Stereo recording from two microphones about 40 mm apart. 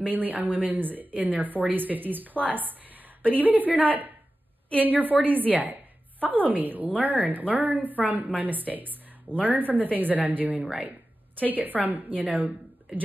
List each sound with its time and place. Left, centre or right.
0.0 s a woman's voice: right